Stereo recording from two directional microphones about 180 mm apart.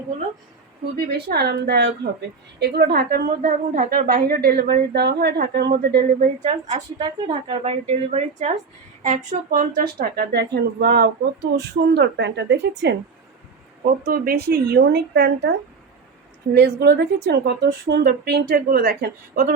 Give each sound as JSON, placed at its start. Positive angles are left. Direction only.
{"t": 0.9, "sound": "a woman's voice", "side_deg": -60}
{"t": 6.4, "sound": "a woman's voice", "side_deg": -40}
{"t": 14.0, "sound": "a woman's voice", "side_deg": -60}
{"t": 16.6, "sound": "a woman's voice", "side_deg": -65}